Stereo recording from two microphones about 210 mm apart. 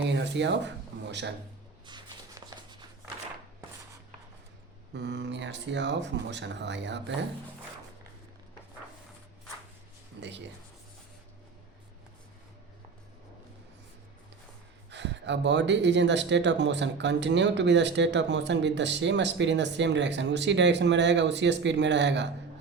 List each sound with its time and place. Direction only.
0.1 s speech: 55° right (ahead or behind)
1.9 s a sound: 20° right (ahead or behind)
4.9 s speech: 55° right (ahead or behind)
10.2 s speech: 55° right (ahead or behind)
14.8 s speech: 55° right (ahead or behind)